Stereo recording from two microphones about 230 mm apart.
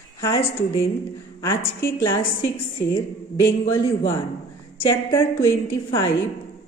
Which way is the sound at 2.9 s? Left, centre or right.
Centre.